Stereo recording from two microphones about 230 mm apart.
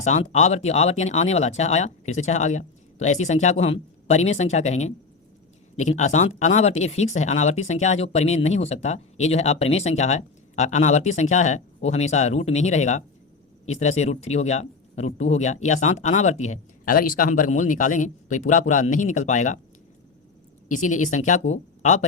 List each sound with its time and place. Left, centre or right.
0.0 s speech: left
20.7 s speech: left